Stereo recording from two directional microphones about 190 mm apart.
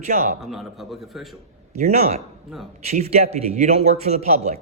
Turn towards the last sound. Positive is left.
turn(degrees=-35)  # may be behind; listen again after turning